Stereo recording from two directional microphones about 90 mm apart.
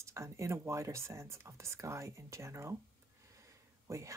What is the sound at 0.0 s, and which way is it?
Speech, 35° right (ahead or behind).